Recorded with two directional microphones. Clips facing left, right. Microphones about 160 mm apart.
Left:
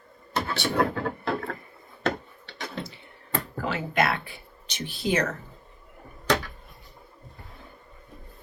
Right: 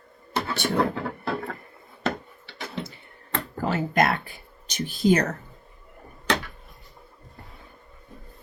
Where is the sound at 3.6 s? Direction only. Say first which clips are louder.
Right 3 dB; 40° right (ahead or behind).